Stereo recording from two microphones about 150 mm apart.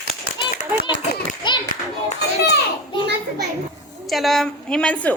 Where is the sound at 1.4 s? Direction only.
30° left (ahead or behind).